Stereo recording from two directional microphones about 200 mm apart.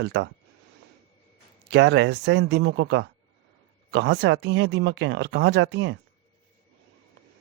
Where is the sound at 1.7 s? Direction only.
60° right (ahead or behind).